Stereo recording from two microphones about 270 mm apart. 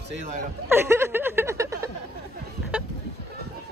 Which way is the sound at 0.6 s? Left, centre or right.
Centre.